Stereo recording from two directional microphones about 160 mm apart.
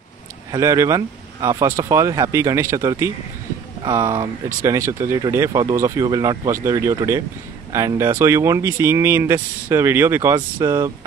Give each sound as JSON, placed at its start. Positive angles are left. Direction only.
{"t": 0.5, "sound": "speech", "side_deg": -20}